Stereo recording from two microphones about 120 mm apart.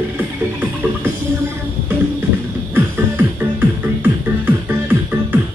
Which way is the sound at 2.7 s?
15° right (ahead or behind).